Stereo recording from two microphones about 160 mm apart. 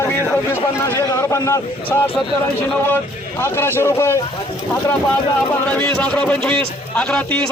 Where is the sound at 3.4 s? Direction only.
15° left (ahead or behind).